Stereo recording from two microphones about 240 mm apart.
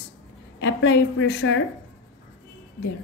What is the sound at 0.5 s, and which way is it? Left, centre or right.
A woman's voice, left.